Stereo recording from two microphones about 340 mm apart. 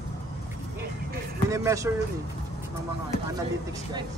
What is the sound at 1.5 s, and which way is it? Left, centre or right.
Speech, centre.